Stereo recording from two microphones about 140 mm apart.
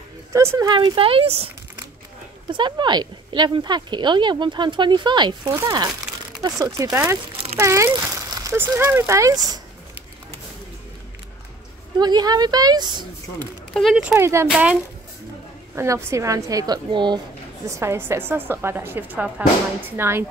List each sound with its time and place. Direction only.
0.3 s speech: 20° right (ahead or behind); by 1.5 s 45° right (ahead or behind)
2.5 s speech: 35° right (ahead or behind)
12.0 s speech: 30° right (ahead or behind)
13.7 s speech: centre (ahead or behind)
14.1 s speech: 20° right (ahead or behind)
14.5 s a woman's voice: 5° right (ahead or behind)
15.7 s speech: 20° right (ahead or behind)
17.6 s a woman's voice: 20° right (ahead or behind)